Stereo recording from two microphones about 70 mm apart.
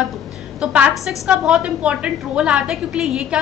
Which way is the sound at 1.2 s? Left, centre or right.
Centre.